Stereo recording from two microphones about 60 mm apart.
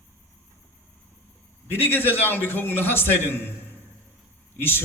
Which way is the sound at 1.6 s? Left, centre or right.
Left.